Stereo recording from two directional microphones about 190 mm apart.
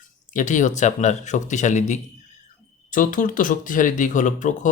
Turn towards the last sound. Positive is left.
turn(degrees=40)  # may be behind; listen again after turning